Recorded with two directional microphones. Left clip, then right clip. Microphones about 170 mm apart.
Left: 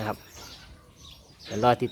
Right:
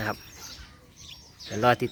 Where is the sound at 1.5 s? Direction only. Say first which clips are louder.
Even; 5° right (ahead or behind).